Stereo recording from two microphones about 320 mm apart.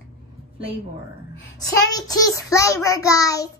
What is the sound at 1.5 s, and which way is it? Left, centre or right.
Child singing, centre.